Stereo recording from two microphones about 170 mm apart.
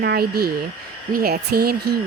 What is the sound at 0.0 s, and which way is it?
A woman's voice, 70° right (ahead or behind).